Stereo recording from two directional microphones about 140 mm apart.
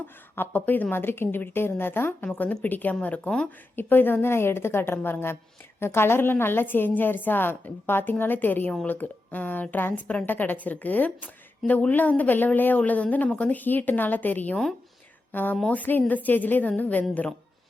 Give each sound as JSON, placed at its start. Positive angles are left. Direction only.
{"t": 0.3, "sound": "a woman's voice", "side_deg": 15}